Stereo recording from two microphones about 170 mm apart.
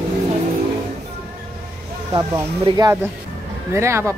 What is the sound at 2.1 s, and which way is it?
Speech, 25° right (ahead or behind).